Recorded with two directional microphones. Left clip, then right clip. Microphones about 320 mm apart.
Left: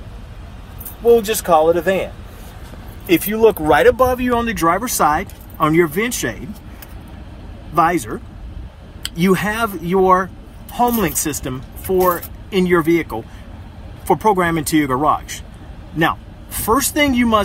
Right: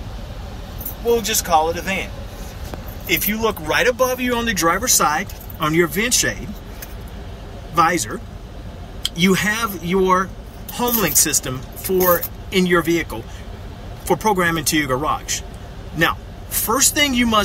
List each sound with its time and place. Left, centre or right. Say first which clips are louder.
1.0 s speech: left 6 dB; left
3.1 s speech: left 6 dB; left
7.7 s speech: left 1 dB; centre